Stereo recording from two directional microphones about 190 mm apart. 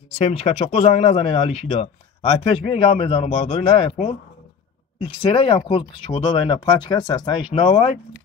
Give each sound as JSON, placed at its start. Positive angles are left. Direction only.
{"t": 0.2, "sound": "speech", "side_deg": 35}